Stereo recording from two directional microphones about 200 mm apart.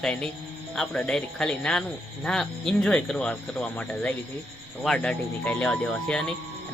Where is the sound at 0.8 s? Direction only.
5° left (ahead or behind).